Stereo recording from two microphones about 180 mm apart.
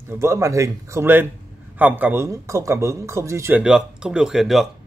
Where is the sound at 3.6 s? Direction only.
5° right (ahead or behind).